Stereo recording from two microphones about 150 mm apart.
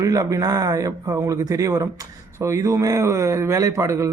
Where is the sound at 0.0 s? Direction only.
20° right (ahead or behind).